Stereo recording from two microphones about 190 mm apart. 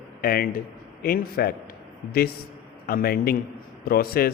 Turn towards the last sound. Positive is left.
turn(degrees=50)  # may be behind; listen again after turning